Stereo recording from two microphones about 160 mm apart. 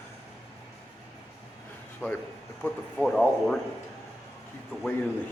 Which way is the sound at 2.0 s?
15° left (ahead or behind).